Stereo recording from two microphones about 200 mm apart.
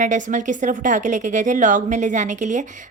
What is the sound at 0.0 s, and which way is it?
A woman's voice, 40° right (ahead or behind).